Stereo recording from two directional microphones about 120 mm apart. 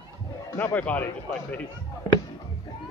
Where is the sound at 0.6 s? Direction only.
15° left (ahead or behind).